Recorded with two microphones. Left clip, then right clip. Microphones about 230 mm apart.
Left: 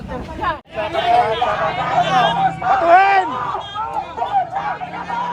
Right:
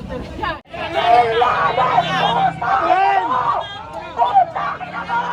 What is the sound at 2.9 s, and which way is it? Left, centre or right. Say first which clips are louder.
Speech: left 6 dB; left.